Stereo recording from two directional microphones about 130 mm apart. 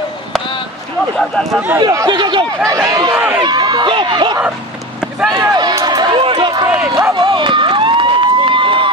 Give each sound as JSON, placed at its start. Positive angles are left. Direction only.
{"t": 1.1, "sound": "speech", "side_deg": 5}
{"t": 1.8, "sound": "speech", "side_deg": -30}
{"t": 6.6, "sound": "speech", "side_deg": -20}
{"t": 7.2, "sound": "crowd", "side_deg": -40}